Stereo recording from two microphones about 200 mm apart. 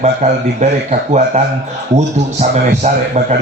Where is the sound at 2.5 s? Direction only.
35° right (ahead or behind).